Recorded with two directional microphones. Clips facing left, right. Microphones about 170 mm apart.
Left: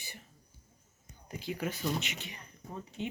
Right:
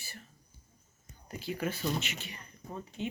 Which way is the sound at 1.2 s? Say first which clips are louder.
Right 1 dB; 15° left (ahead or behind).